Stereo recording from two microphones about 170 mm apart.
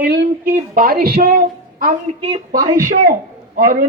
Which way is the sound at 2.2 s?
25° right (ahead or behind).